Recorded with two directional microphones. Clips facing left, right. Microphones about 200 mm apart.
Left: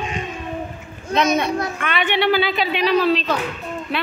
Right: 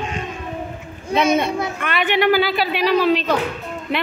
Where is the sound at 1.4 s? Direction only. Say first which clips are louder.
Even; 10° right (ahead or behind).